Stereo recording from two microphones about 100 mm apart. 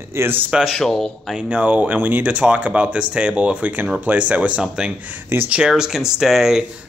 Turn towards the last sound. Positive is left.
turn(degrees=-5)  # may be behind; listen again after turning